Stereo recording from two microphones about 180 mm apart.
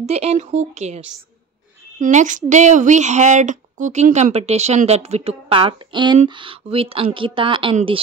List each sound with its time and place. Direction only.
0.0 s a woman's voice: 35° right (ahead or behind)